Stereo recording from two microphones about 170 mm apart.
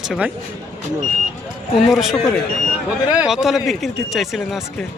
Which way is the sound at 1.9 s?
Centre (ahead or behind).